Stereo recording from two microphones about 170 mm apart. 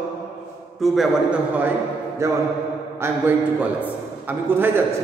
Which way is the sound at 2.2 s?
15° right (ahead or behind).